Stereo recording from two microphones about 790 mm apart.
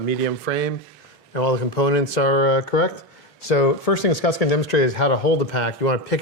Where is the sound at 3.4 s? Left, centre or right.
Left.